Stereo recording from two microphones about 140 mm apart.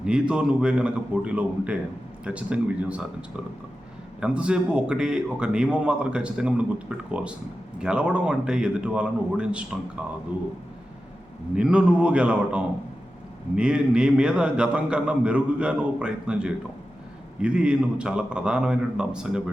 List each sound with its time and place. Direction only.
0.0 s a man's voice: 5° right (ahead or behind)
11.5 s a man's voice: 10° right (ahead or behind)